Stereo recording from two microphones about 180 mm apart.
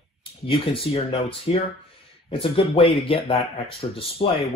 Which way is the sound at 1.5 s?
30° left (ahead or behind).